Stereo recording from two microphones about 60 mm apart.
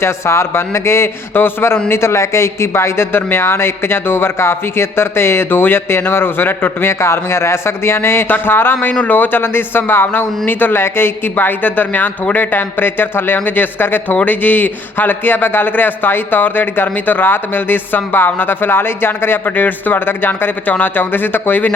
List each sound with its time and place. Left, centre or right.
0.0 s speech: left
1.9 s a man's voice: left